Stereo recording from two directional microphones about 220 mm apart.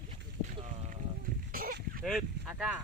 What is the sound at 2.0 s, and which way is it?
Boat, centre (ahead or behind).